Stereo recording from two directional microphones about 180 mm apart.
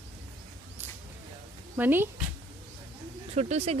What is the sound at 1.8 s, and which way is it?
Speech, 10° right (ahead or behind).